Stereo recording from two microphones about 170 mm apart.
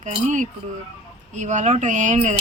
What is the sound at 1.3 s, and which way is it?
Speech, 45° right (ahead or behind).